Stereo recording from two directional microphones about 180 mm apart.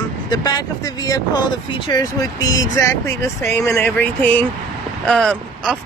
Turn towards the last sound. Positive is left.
turn(degrees=0)  # may be behind; listen again after turning